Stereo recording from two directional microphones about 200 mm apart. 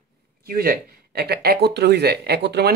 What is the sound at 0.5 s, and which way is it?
Speech, 50° right (ahead or behind).